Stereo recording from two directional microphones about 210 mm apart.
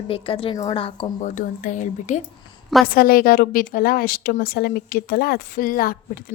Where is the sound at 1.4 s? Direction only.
35° left (ahead or behind).